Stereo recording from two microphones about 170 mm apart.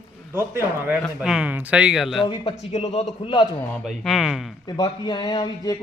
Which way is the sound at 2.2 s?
25° left (ahead or behind).